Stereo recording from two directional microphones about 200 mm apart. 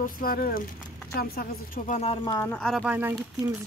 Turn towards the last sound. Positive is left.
turn(degrees=-10)  # may be behind; listen again after turning